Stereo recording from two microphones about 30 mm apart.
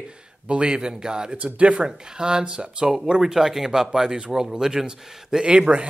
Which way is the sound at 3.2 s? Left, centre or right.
Centre.